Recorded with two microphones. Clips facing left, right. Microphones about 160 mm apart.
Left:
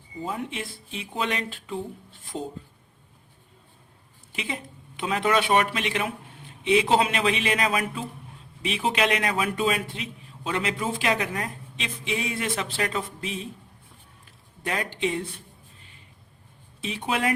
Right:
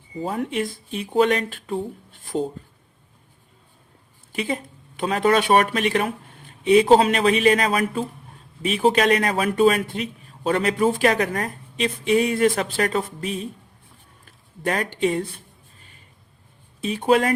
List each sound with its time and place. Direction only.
0.3 s speech: 50° right (ahead or behind)
4.4 s speech: 45° right (ahead or behind)
14.6 s speech: 50° right (ahead or behind)
16.8 s speech: 45° right (ahead or behind)